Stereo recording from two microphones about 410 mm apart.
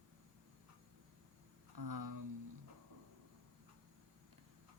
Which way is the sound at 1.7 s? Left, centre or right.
Right.